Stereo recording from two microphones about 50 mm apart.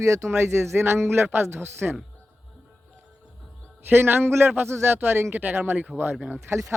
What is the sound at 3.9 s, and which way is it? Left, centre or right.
A man's voice, right.